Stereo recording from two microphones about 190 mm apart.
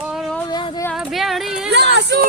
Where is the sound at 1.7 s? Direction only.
65° right (ahead or behind).